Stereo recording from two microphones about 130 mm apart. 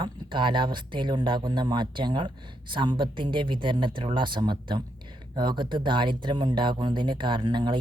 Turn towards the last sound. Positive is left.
turn(degrees=-35)  # may be behind; listen again after turning